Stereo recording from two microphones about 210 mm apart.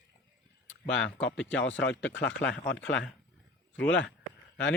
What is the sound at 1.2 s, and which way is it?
Speech, 60° left (ahead or behind).